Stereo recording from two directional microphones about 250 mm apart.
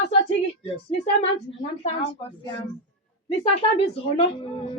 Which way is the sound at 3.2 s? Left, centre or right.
Left.